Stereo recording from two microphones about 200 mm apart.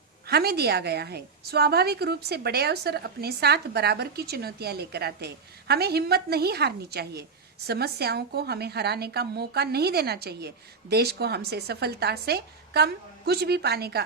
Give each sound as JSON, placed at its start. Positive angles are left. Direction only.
{"t": 0.3, "sound": "a woman's voice", "side_deg": -50}